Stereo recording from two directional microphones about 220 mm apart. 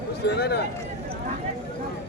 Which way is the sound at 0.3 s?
50° left (ahead or behind).